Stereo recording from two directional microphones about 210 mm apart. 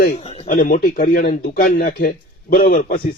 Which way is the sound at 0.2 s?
30° left (ahead or behind).